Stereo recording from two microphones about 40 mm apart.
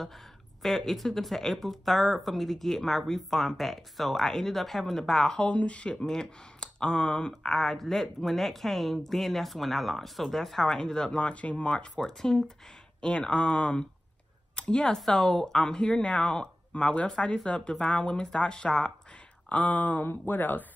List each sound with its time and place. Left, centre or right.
0.0 s speech: centre
5.5 s speech: left
7.5 s speech: centre
11.1 s speech: left; by 12.5 s centre
13.0 s speech: left
15.0 s speech: centre
19.5 s speech: left
20.1 s speech: left